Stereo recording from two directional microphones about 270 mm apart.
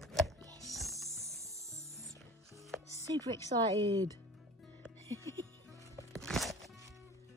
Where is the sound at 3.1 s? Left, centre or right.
Centre.